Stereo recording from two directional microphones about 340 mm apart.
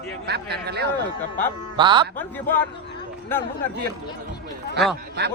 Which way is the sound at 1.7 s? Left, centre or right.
Centre.